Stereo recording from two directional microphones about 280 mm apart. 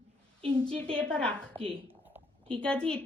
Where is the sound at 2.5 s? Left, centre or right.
Centre.